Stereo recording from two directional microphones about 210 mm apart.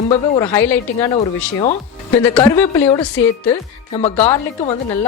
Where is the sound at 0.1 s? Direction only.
30° left (ahead or behind).